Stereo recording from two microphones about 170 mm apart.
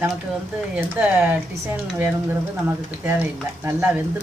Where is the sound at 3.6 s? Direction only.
15° right (ahead or behind).